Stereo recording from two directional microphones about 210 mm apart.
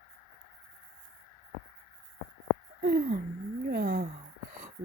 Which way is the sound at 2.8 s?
45° right (ahead or behind).